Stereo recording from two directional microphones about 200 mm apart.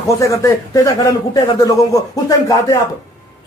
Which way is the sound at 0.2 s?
15° left (ahead or behind).